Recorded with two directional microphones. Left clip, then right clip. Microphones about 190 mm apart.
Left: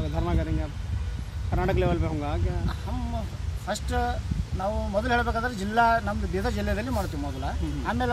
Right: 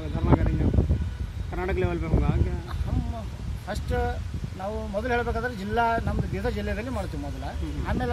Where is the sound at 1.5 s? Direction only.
50° left (ahead or behind).